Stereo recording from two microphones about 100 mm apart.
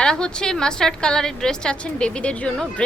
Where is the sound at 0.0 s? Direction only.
10° left (ahead or behind).